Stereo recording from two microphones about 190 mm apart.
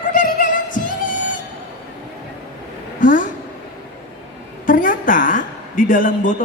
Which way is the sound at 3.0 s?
40° left (ahead or behind).